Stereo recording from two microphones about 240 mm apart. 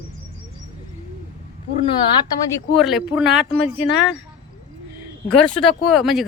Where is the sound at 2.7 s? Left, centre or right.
Centre.